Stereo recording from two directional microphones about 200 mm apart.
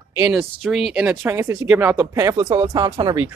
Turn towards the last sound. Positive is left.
turn(degrees=-20)  # may be behind; listen again after turning